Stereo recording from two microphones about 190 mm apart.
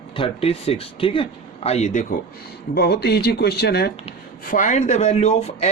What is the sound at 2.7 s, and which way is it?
Speech, 55° left (ahead or behind).